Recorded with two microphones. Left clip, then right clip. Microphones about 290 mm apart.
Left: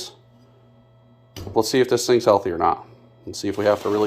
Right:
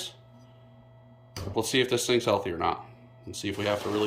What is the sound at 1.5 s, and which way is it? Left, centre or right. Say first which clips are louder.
Speech: left 7 dB; centre.